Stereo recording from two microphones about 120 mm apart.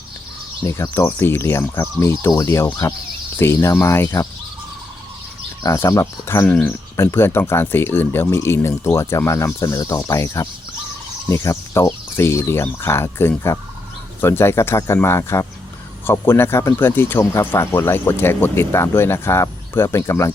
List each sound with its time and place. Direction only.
0.6 s speech: 20° left (ahead or behind)
2.3 s speech: 35° left (ahead or behind)
2.6 s speech: 25° left (ahead or behind)
5.6 s speech: 25° left (ahead or behind)
6.5 s speech: 10° left (ahead or behind)
6.9 s speech: 20° left (ahead or behind)